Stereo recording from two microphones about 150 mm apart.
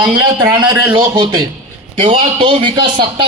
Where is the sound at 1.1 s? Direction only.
30° right (ahead or behind).